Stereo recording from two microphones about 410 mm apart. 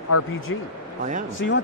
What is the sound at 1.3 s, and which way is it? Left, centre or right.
Speech, left.